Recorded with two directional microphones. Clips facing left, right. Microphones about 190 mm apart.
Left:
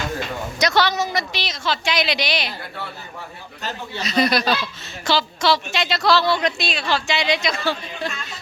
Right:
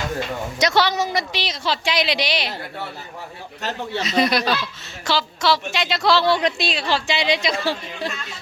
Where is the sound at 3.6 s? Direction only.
75° right (ahead or behind).